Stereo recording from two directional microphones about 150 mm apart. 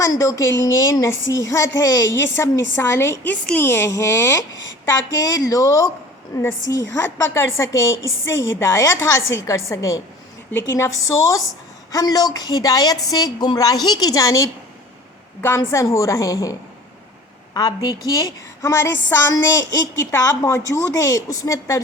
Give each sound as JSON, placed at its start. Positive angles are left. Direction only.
{"t": 0.0, "sound": "a woman's voice", "side_deg": 20}